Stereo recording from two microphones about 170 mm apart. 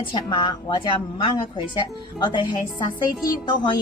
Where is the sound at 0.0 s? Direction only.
30° left (ahead or behind).